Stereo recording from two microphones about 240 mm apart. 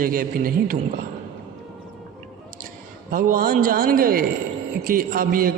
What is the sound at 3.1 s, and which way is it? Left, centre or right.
A woman's voice, right.